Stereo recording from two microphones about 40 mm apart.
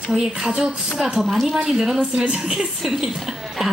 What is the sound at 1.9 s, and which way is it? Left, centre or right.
Speech, right.